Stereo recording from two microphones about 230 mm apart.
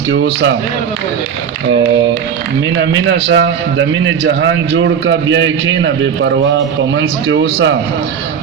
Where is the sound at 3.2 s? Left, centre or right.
Right.